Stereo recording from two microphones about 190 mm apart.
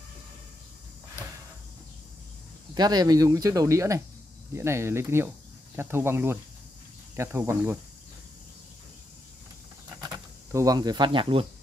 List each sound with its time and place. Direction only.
2.7 s speech: 20° right (ahead or behind)
9.9 s speech: 20° right (ahead or behind)